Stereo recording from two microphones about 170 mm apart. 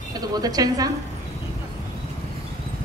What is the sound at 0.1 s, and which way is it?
Speech, 20° right (ahead or behind).